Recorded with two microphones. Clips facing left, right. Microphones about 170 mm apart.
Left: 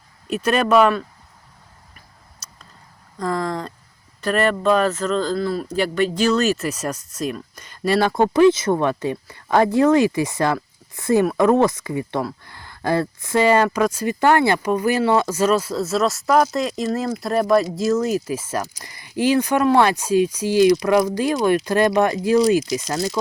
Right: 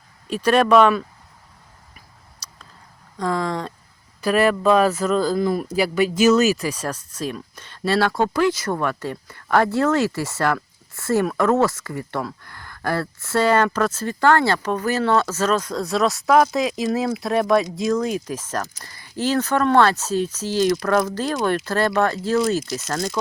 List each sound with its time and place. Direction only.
0.3 s speech: 5° left (ahead or behind)
3.2 s speech: centre (ahead or behind)